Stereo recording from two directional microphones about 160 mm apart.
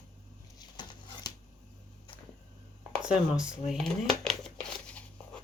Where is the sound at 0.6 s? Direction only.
25° left (ahead or behind).